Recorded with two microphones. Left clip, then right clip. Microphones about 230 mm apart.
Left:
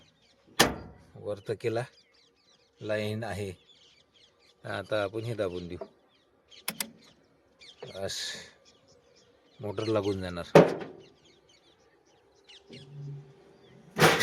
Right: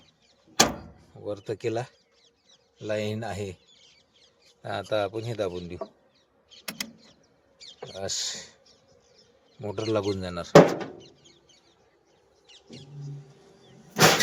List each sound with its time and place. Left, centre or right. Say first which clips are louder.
1.2 s speech: right 1 dB; centre
4.6 s speech: right 3 dB; centre
7.6 s rodents: right 3 dB; right
7.9 s speech: right 3 dB; centre
9.6 s speech: right 2 dB; centre
12.5 s bird: right 2 dB; centre
13.9 s vehicle: right 3 dB; right